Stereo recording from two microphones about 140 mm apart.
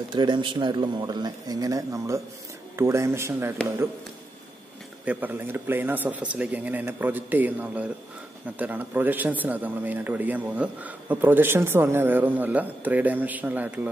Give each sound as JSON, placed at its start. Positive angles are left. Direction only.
{"t": 0.1, "sound": "speech", "side_deg": -35}
{"t": 5.0, "sound": "speech", "side_deg": -10}